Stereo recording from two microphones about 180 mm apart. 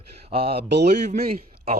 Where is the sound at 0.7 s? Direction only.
70° right (ahead or behind).